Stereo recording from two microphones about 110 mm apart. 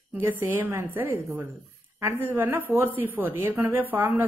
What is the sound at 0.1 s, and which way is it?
A woman's voice, 20° right (ahead or behind).